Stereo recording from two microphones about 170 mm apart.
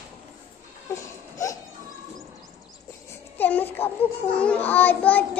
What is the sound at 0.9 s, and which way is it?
Baby cry, 20° left (ahead or behind).